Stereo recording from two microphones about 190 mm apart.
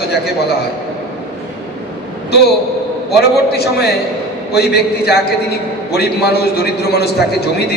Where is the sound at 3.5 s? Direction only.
60° left (ahead or behind).